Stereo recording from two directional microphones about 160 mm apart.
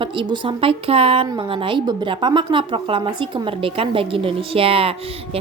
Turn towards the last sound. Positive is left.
turn(degrees=-35)  # may be behind; listen again after turning